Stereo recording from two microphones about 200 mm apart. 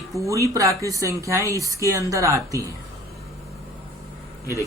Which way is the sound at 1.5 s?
15° left (ahead or behind).